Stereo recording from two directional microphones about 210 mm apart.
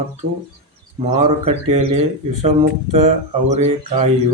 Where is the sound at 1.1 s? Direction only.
30° right (ahead or behind).